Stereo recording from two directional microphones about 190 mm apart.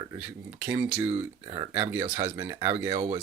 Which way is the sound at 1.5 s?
25° right (ahead or behind).